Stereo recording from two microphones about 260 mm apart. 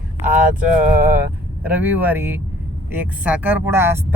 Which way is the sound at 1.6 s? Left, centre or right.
Centre.